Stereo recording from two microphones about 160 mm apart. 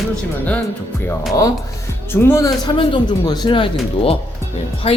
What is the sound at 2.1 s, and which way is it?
Speech, 15° left (ahead or behind).